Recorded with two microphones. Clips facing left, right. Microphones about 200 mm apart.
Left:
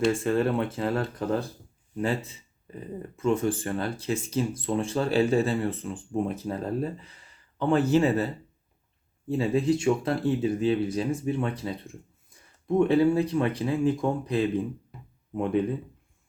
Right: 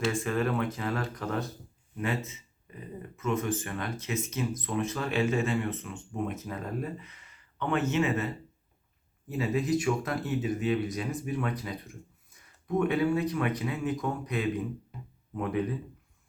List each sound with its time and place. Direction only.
0.1 s speech: 30° left (ahead or behind)